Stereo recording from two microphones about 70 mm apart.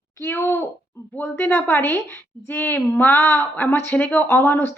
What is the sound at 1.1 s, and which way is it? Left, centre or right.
A woman's voice, left.